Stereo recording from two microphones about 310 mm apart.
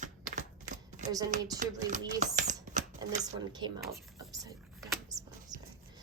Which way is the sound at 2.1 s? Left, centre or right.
Right.